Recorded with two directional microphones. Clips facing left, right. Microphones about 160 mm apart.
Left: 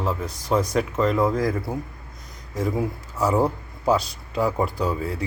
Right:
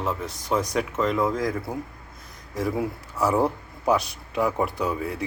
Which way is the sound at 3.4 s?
30° left (ahead or behind).